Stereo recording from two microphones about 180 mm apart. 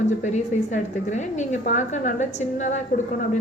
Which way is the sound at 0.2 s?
40° left (ahead or behind).